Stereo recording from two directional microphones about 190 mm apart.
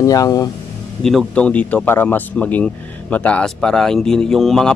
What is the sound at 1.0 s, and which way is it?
Speech, 5° left (ahead or behind).